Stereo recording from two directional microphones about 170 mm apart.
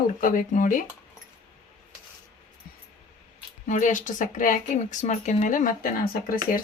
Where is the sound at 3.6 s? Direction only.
45° left (ahead or behind).